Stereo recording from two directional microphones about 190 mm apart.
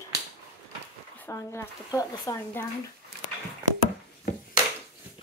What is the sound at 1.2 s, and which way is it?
Speech, 15° left (ahead or behind).